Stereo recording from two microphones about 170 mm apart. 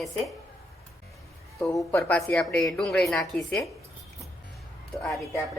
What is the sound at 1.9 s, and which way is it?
Speech, 10° left (ahead or behind).